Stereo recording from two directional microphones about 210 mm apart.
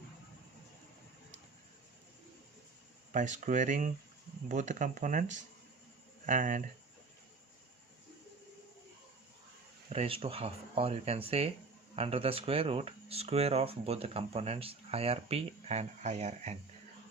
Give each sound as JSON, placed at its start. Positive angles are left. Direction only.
{"t": 3.1, "sound": "speech", "side_deg": -35}
{"t": 9.9, "sound": "speech", "side_deg": -30}